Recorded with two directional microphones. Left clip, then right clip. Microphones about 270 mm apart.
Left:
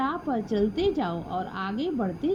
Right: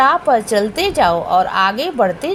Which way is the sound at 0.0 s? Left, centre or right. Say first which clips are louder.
Right 16 dB; left.